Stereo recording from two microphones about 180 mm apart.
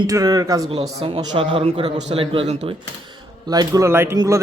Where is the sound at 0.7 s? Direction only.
35° right (ahead or behind).